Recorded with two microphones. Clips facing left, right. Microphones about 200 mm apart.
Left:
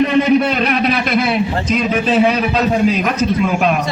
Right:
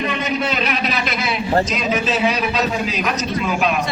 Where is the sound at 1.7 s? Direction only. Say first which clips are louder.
Left 5 dB; 55° left (ahead or behind).